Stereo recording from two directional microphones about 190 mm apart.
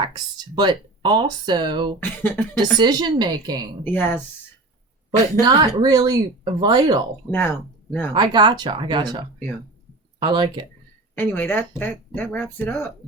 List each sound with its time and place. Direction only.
0.0 s speech: 20° right (ahead or behind)
2.0 s speech: 10° left (ahead or behind)
2.6 s speech: 20° right (ahead or behind)
3.8 s speech: 10° left (ahead or behind)
5.5 s speech: 20° right (ahead or behind)
7.3 s speech: 10° left (ahead or behind)
8.1 s speech: 25° right (ahead or behind)
11.1 s speech: 10° left (ahead or behind)